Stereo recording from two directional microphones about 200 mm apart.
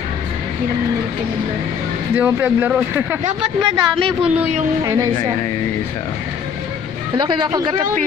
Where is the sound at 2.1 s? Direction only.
10° right (ahead or behind).